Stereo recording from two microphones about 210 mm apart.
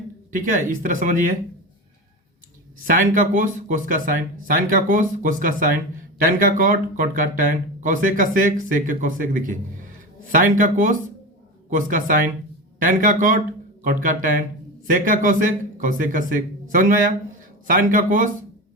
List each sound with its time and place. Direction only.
0.3 s speech: 40° right (ahead or behind)
2.8 s speech: 40° right (ahead or behind)